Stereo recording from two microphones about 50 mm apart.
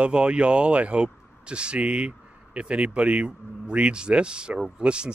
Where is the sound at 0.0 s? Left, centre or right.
Right.